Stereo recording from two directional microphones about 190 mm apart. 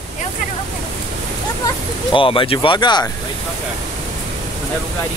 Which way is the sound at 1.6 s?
25° left (ahead or behind).